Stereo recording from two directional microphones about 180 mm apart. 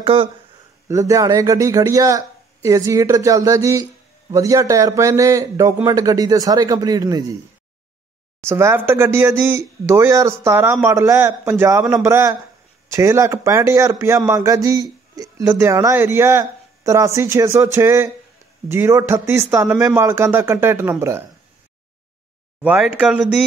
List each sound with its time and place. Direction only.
0.0 s a man's voice: 30° right (ahead or behind)
0.8 s a man's voice: 15° right (ahead or behind)
8.5 s speech: 15° right (ahead or behind)
22.6 s speech: 5° right (ahead or behind)